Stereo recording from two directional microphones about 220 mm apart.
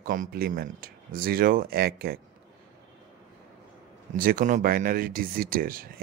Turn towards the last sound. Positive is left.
turn(degrees=-40)  # may be behind; listen again after turning